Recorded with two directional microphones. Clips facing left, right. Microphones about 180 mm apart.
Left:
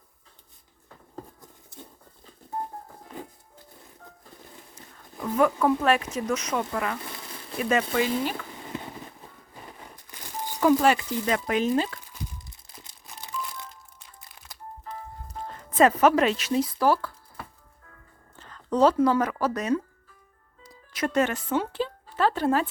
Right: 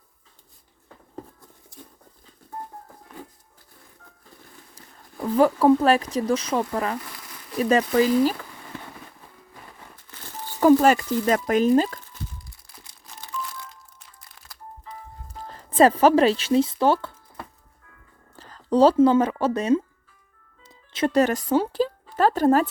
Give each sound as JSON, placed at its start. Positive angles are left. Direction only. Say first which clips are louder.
{"t": 1.7, "sound": "patter", "louder": "even", "side_deg": 25}
{"t": 5.4, "sound": "speech", "louder": "right 5 dB", "side_deg": -35}
{"t": 7.0, "sound": "a sound", "louder": "left 3 dB", "side_deg": 25}
{"t": 7.6, "sound": "speech", "louder": "right 5 dB", "side_deg": -35}
{"t": 9.9, "sound": "a sound", "louder": "left 2 dB", "side_deg": 15}
{"t": 10.6, "sound": "speech", "louder": "right 5 dB", "side_deg": -40}
{"t": 12.5, "sound": "crumpling", "louder": "even", "side_deg": 20}
{"t": 15.4, "sound": "speech", "louder": "right 3 dB", "side_deg": -30}
{"t": 18.3, "sound": "speech", "louder": "right 4 dB", "side_deg": -35}
{"t": 20.7, "sound": "music", "louder": "right 5 dB", "side_deg": -25}